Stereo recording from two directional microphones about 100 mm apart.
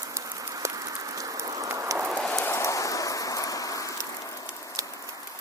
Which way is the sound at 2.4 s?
30° left (ahead or behind).